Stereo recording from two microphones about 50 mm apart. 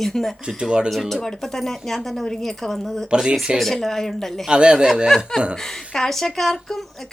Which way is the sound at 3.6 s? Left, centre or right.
Centre.